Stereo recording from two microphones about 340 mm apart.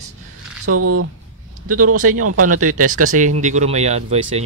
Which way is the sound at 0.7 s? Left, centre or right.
Right.